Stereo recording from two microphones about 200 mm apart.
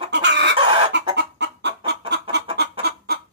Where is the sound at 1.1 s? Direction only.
60° right (ahead or behind).